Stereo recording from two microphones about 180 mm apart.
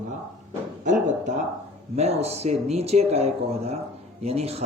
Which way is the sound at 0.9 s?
40° right (ahead or behind).